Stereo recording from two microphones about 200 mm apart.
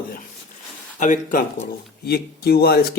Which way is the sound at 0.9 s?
40° left (ahead or behind).